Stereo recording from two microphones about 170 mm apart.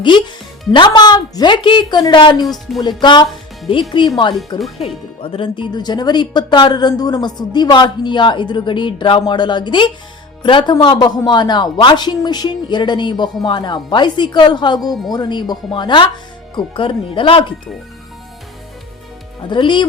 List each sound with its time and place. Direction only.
0.0 s speech: 30° left (ahead or behind)
19.5 s speech: 30° left (ahead or behind)